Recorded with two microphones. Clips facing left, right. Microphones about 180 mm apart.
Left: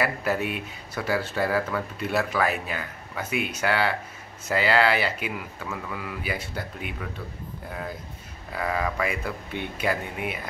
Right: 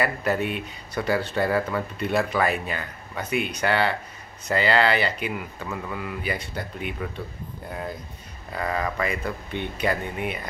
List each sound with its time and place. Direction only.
0.0 s speech: 5° left (ahead or behind)
8.5 s speech: 5° left (ahead or behind)